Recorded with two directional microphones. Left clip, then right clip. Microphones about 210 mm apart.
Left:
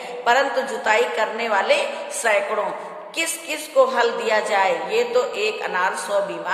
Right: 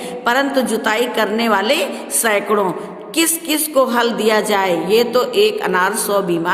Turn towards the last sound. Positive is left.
turn(degrees=-50)  # may be behind; listen again after turning